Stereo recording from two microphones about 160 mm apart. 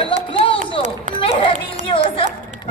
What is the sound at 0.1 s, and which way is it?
Music, 35° left (ahead or behind).